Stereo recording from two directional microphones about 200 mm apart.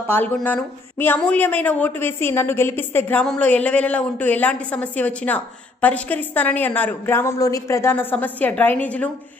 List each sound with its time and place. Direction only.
0.1 s speech: 10° left (ahead or behind)